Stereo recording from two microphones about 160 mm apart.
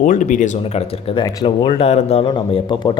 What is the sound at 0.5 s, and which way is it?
Speech, 40° left (ahead or behind).